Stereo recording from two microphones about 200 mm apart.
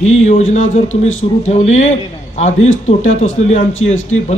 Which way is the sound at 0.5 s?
35° left (ahead or behind).